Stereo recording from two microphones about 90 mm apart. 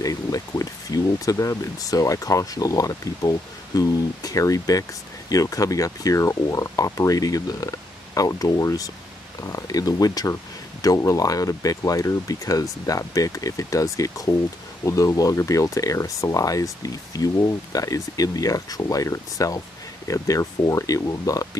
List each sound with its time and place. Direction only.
0.0 s speech: 40° left (ahead or behind)